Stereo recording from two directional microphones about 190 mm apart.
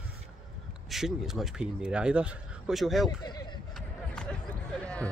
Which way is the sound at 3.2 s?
20° left (ahead or behind).